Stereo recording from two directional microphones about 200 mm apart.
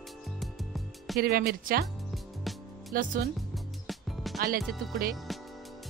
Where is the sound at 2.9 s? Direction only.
45° right (ahead or behind).